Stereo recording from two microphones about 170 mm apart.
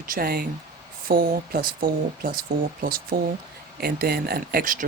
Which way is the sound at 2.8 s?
60° right (ahead or behind).